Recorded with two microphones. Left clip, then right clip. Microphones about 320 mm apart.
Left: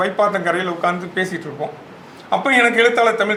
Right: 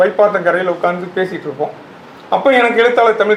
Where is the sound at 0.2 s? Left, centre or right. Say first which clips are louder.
Right 5 dB; left.